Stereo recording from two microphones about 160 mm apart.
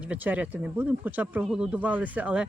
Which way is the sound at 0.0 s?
10° right (ahead or behind).